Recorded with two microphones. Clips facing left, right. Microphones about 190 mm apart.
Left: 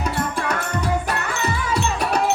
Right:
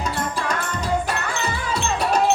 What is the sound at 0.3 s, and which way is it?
Music, 60° left (ahead or behind).